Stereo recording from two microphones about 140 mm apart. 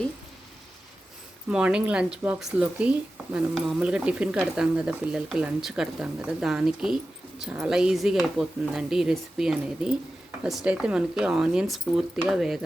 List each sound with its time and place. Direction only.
1.5 s speech: 5° right (ahead or behind)